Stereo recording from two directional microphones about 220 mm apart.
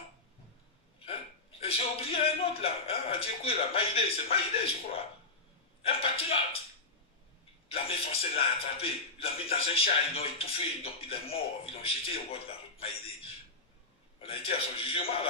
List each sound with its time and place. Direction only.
1.6 s a man's voice: 25° left (ahead or behind)
7.7 s a man's voice: 25° left (ahead or behind)
14.2 s a man's voice: 25° left (ahead or behind)